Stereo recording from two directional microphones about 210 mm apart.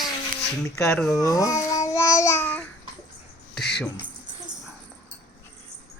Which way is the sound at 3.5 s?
50° left (ahead or behind).